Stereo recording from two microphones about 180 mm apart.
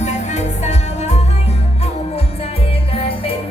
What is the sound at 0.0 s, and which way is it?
Music, 40° left (ahead or behind).